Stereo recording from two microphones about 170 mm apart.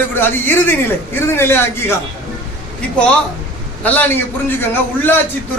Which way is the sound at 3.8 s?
10° left (ahead or behind).